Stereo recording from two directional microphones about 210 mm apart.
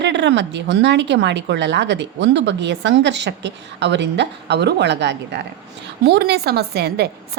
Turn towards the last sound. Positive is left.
turn(degrees=-50)  # may be behind; listen again after turning